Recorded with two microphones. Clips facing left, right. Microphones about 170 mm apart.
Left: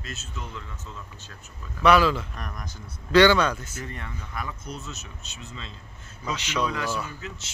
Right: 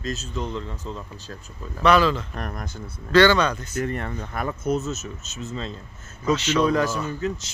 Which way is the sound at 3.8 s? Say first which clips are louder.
Right 10 dB; 55° right (ahead or behind).